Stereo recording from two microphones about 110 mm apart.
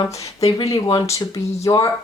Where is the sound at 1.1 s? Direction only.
30° left (ahead or behind).